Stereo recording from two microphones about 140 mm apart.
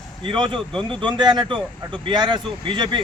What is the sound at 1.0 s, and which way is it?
Speech, 35° right (ahead or behind).